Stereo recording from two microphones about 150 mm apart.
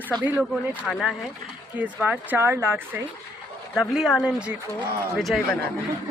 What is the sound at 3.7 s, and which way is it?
Speech, 5° right (ahead or behind).